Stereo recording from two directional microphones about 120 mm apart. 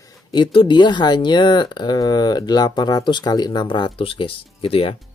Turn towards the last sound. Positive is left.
turn(degrees=50)  # may be behind; listen again after turning